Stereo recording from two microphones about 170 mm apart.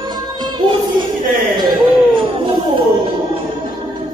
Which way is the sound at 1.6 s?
25° right (ahead or behind).